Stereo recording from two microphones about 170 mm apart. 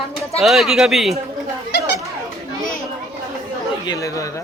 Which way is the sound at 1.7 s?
75° left (ahead or behind).